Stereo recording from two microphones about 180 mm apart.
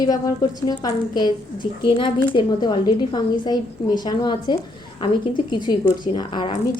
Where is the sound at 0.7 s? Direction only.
25° left (ahead or behind).